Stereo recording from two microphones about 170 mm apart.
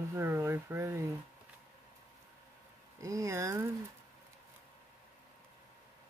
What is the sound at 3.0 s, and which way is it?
Speech, 20° right (ahead or behind).